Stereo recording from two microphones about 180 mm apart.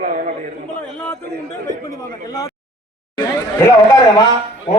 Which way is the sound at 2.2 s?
20° left (ahead or behind).